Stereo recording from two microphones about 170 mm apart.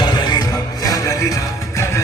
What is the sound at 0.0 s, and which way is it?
Music, 25° left (ahead or behind).